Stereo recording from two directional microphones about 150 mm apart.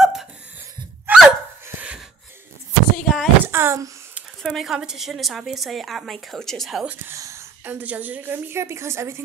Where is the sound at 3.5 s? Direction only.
15° right (ahead or behind).